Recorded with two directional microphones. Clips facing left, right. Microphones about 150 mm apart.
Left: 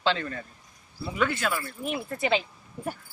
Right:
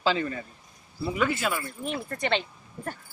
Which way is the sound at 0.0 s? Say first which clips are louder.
Right 1 dB; 5° right (ahead or behind).